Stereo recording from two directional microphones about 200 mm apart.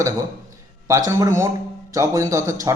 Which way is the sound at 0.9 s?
15° right (ahead or behind).